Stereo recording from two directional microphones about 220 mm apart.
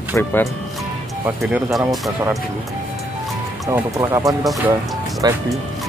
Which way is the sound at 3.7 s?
15° right (ahead or behind).